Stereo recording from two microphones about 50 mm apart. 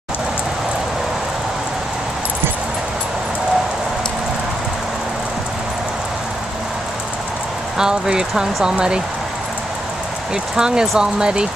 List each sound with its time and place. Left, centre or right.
7.7 s speech: centre
10.3 s speech: centre